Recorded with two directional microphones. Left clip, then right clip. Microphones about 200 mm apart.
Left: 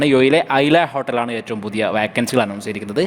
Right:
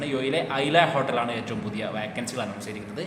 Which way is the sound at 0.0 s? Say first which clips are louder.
Left 12 dB; 50° left (ahead or behind).